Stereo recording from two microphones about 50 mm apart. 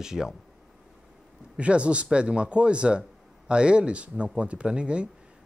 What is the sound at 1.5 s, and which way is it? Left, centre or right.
Speech, right.